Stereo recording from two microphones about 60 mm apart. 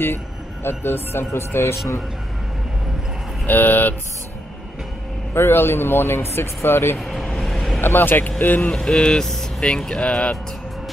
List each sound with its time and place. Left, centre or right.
0.7 s a man's voice: left
3.4 s speech: left
5.3 s speech: left
7.0 s speech: centre
7.3 s vehicle: centre
7.8 s speech: left
8.6 s speech: centre